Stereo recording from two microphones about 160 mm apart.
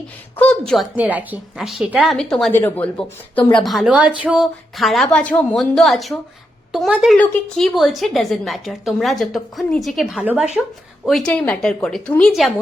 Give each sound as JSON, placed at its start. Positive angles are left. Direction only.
{"t": 0.3, "sound": "a woman's voice", "side_deg": 5}
{"t": 0.9, "sound": "a woman's voice", "side_deg": -10}
{"t": 2.5, "sound": "speech", "side_deg": 15}
{"t": 3.6, "sound": "a woman's voice", "side_deg": 0}
{"t": 11.3, "sound": "a woman's voice", "side_deg": 10}